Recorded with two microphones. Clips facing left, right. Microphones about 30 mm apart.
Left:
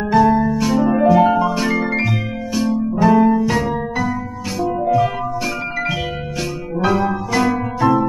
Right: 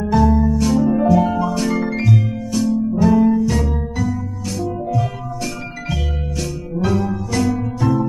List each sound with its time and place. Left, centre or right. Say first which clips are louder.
0.3 s music: left 1 dB; left
0.6 s music: even; centre
0.8 s music: left 6 dB; left